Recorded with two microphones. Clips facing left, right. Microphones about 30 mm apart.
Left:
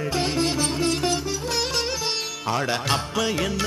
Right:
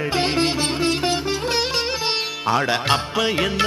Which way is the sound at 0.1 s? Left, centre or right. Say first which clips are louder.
Right 3 dB; right.